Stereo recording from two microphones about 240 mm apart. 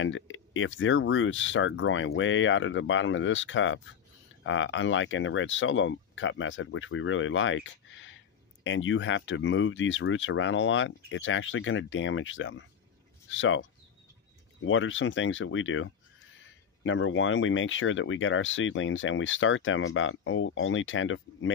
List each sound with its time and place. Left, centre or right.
0.0 s speech: left